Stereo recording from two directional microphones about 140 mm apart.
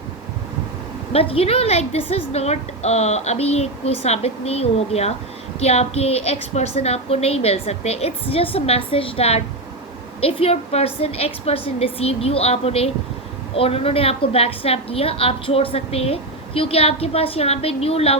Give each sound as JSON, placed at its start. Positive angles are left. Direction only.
{"t": 1.1, "sound": "a woman's voice", "side_deg": 45}